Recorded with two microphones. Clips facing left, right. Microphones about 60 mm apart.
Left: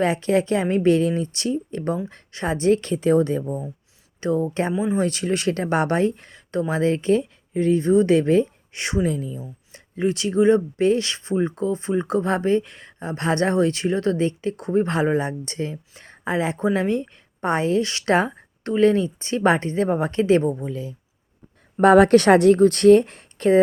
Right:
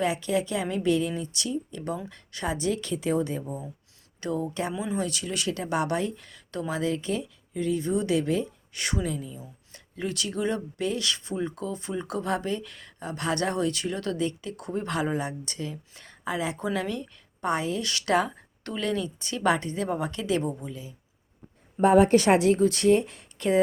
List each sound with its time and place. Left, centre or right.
0.0 s speech: left
3.4 s speech: left
4.9 s speech: left
9.0 s speech: left
9.4 s speech: left
21.8 s speech: left